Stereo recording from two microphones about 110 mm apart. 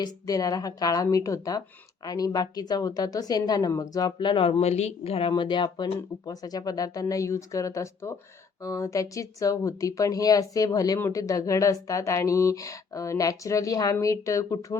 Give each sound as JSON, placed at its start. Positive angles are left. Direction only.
{"t": 0.0, "sound": "a woman's voice", "side_deg": 35}
{"t": 5.3, "sound": "a woman's voice", "side_deg": 45}